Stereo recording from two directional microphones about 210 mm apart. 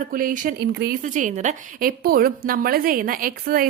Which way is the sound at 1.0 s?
35° right (ahead or behind).